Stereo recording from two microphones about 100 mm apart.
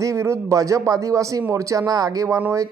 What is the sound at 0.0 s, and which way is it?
Speech, 30° right (ahead or behind).